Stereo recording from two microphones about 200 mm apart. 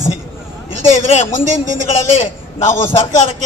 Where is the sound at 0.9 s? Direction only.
35° left (ahead or behind).